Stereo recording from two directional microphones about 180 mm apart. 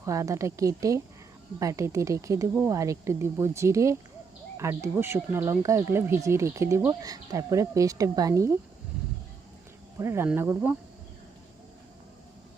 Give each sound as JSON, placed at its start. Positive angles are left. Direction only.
{"t": 0.0, "sound": "speech", "side_deg": -15}
{"t": 10.0, "sound": "speech", "side_deg": -15}